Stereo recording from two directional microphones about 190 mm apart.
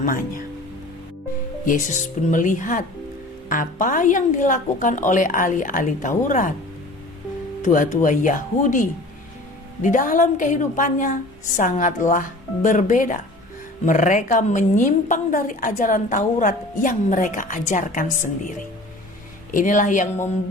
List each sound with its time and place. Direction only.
0.0 s a woman's voice: 45° left (ahead or behind)
1.6 s a woman's voice: 40° left (ahead or behind)
7.6 s a woman's voice: 40° left (ahead or behind)